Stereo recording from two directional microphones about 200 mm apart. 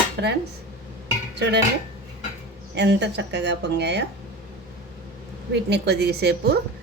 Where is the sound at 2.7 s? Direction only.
60° right (ahead or behind).